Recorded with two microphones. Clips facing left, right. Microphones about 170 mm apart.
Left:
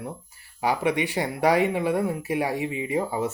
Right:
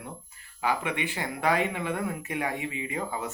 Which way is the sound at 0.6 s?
15° left (ahead or behind).